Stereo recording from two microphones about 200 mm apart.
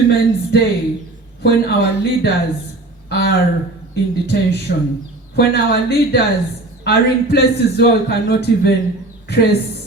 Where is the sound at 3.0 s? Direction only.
55° left (ahead or behind).